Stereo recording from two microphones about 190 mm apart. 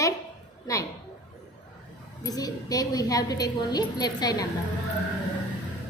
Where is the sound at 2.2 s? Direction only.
20° left (ahead or behind).